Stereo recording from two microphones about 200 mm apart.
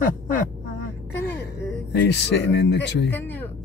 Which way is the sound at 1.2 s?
55° left (ahead or behind).